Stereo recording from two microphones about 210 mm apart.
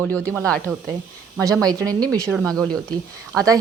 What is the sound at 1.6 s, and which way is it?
Speech, 15° right (ahead or behind).